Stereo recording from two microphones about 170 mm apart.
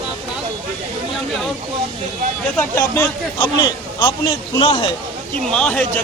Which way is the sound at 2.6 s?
10° left (ahead or behind).